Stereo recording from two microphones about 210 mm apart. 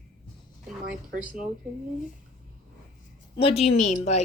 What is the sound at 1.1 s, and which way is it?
Speech, 40° right (ahead or behind).